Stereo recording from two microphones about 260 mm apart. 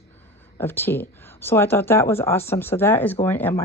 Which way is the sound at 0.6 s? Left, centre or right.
Centre.